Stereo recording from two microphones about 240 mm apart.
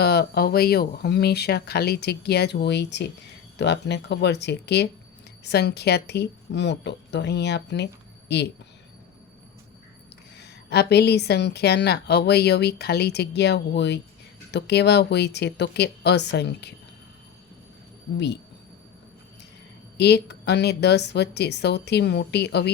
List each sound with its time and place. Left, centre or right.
0.0 s a woman's voice: left
10.3 s a woman's voice: left
20.0 s a woman's voice: left